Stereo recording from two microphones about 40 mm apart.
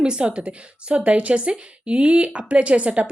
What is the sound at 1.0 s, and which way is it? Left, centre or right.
A woman's voice, right.